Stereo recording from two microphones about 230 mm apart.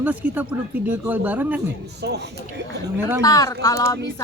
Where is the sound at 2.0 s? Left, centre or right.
Right.